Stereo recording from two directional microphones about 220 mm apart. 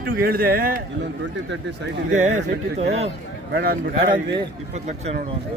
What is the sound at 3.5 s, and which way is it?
Speech, 45° right (ahead or behind).